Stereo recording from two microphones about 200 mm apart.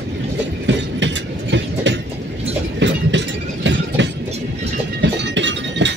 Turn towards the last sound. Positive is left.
turn(degrees=-65)  # may be behind; listen again after turning